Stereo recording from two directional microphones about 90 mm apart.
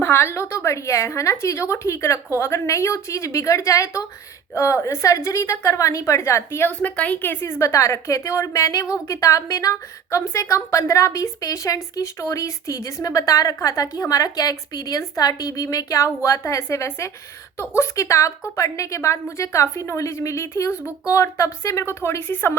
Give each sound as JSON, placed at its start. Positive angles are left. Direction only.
{"t": 0.0, "sound": "a woman's voice", "side_deg": 30}
{"t": 6.8, "sound": "a woman's voice", "side_deg": 15}